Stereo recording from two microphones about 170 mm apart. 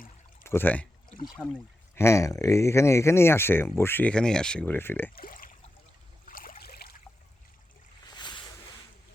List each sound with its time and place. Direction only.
0.4 s speech: 15° left (ahead or behind)
5.1 s speech: 55° left (ahead or behind)
6.2 s a sound: 55° left (ahead or behind)
8.1 s boat: 25° left (ahead or behind)